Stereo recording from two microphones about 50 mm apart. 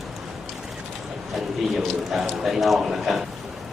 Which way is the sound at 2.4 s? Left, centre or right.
Centre.